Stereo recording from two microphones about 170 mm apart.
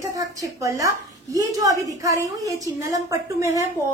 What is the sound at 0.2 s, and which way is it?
A woman's voice, 20° right (ahead or behind).